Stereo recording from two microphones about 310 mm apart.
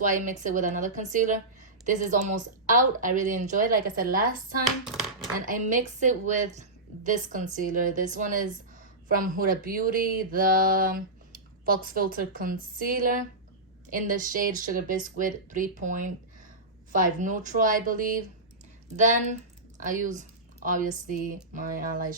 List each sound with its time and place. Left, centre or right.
0.0 s speech: right
5.5 s speech: right